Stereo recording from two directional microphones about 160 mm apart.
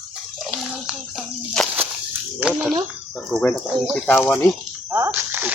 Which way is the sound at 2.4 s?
10° right (ahead or behind).